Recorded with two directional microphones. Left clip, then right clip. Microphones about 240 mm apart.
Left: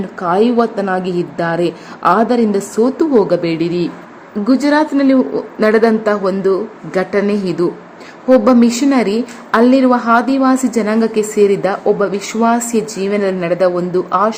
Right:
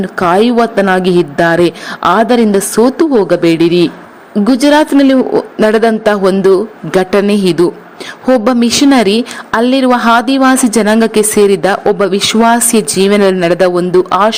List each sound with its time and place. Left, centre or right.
0.2 s a woman's voice: right